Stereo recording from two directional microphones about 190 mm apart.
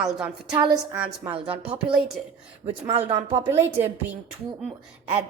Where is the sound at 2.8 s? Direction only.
30° right (ahead or behind).